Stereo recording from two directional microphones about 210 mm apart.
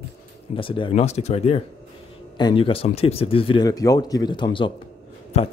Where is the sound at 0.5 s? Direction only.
25° left (ahead or behind).